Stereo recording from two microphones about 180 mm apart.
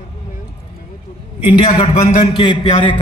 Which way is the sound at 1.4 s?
30° left (ahead or behind).